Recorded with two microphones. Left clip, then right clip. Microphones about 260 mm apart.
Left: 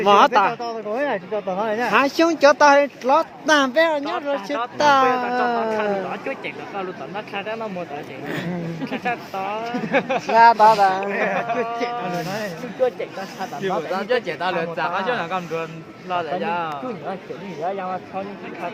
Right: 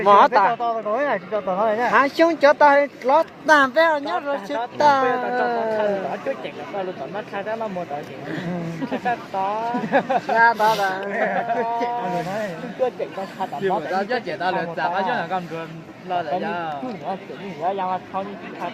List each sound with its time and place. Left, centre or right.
0.0 s speech: left
7.3 s speech: left
9.6 s speech: left
13.6 s speech: left